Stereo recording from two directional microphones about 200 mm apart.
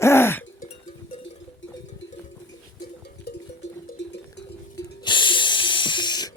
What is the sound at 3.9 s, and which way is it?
Cowbell, 60° left (ahead or behind).